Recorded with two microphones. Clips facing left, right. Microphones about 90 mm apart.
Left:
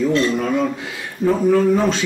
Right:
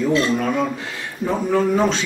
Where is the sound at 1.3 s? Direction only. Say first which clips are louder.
Left 3 dB; 15° right (ahead or behind).